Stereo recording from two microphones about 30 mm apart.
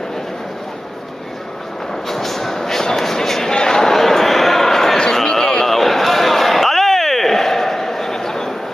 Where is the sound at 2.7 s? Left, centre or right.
Centre.